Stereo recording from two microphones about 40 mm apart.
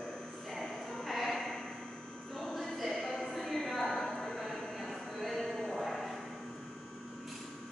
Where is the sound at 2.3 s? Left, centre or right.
Centre.